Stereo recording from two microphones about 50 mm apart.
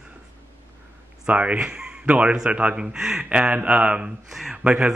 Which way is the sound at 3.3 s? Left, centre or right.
Right.